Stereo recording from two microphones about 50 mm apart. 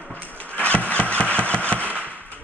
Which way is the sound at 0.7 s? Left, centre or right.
Left.